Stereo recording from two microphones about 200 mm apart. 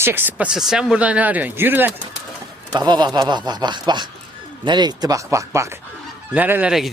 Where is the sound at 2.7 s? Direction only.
20° right (ahead or behind); by 6.9 s 5° right (ahead or behind).